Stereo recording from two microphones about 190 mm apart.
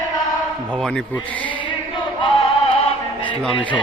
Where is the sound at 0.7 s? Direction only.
5° left (ahead or behind).